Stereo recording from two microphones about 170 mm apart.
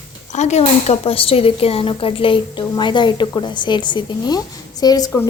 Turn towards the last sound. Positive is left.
turn(degrees=20)  # may be behind; listen again after turning